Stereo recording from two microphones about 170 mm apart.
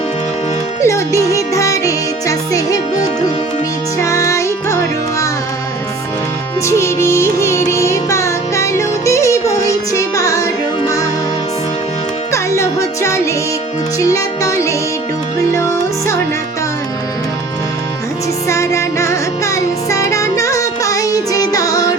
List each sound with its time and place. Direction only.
0.8 s music: 15° left (ahead or behind)
6.7 s music: 15° left (ahead or behind)
12.3 s music: 15° left (ahead or behind)
18.4 s music: 15° left (ahead or behind)